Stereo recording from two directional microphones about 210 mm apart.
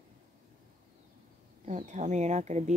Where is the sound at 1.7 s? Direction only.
35° right (ahead or behind).